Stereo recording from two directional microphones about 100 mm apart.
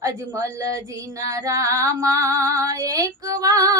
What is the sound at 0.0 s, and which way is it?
Female singing, 30° right (ahead or behind).